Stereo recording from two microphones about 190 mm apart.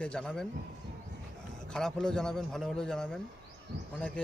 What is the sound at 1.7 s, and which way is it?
Speech, 5° left (ahead or behind).